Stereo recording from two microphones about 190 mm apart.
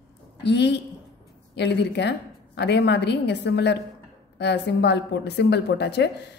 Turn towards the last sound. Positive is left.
turn(degrees=65)  # may be behind; listen again after turning